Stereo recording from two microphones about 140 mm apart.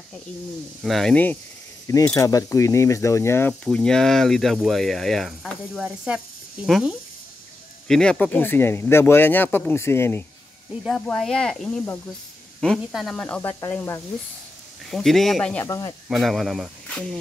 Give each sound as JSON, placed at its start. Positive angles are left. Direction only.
{"t": 0.8, "sound": "speech", "side_deg": 0}
{"t": 2.1, "sound": "speech", "side_deg": 25}
{"t": 3.6, "sound": "speech", "side_deg": 5}
{"t": 7.9, "sound": "speech", "side_deg": 5}
{"t": 10.8, "sound": "speech", "side_deg": 5}
{"t": 14.9, "sound": "speech", "side_deg": 0}
{"t": 15.6, "sound": "speech", "side_deg": 25}
{"t": 16.1, "sound": "speech", "side_deg": 0}